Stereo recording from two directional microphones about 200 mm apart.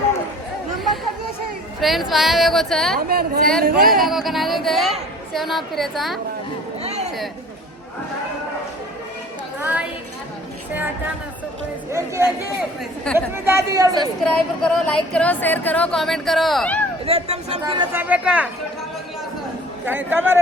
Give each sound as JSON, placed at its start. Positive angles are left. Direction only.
{"t": 1.8, "sound": "speech", "side_deg": 0}
{"t": 3.1, "sound": "a woman's voice", "side_deg": -50}
{"t": 4.0, "sound": "speech", "side_deg": 0}
{"t": 6.8, "sound": "a sound", "side_deg": -30}
{"t": 9.6, "sound": "a sound", "side_deg": -10}
{"t": 11.9, "sound": "speech", "side_deg": -15}
{"t": 14.3, "sound": "speech", "side_deg": 5}
{"t": 17.1, "sound": "speech", "side_deg": -30}
{"t": 17.9, "sound": "speech", "side_deg": -10}
{"t": 19.8, "sound": "speech", "side_deg": -10}